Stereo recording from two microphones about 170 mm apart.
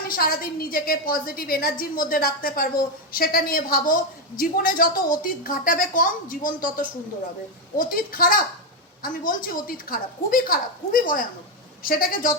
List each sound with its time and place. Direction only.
0.1 s a woman's voice: 60° left (ahead or behind)